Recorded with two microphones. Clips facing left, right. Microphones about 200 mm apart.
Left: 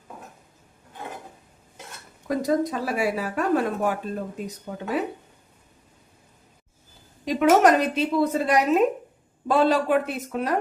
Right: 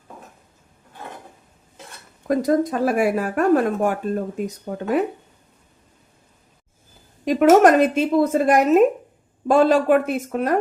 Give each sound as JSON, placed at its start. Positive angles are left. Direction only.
{"t": 2.2, "sound": "speech", "side_deg": -50}
{"t": 7.3, "sound": "speech", "side_deg": -45}